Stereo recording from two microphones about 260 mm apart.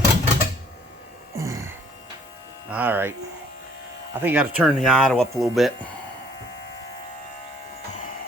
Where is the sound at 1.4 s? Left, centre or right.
Centre.